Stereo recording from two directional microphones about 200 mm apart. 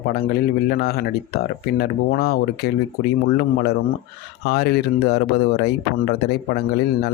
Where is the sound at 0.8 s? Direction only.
50° left (ahead or behind).